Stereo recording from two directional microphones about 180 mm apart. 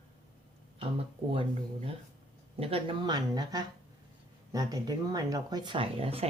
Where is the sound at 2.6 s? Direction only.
30° right (ahead or behind).